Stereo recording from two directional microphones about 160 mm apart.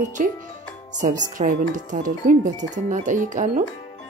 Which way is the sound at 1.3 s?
55° right (ahead or behind).